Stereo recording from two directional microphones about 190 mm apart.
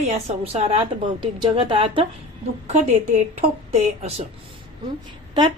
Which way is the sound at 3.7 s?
35° right (ahead or behind).